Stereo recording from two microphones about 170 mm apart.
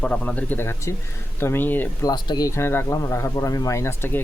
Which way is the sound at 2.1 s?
25° left (ahead or behind).